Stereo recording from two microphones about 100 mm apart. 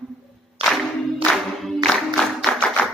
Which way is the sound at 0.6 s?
Centre (ahead or behind).